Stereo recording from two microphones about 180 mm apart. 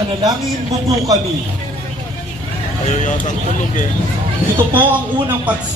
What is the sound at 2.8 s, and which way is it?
Speech, 40° left (ahead or behind).